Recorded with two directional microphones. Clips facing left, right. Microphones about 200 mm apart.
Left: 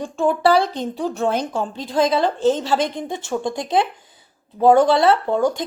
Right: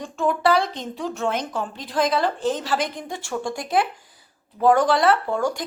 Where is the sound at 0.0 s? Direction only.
30° left (ahead or behind).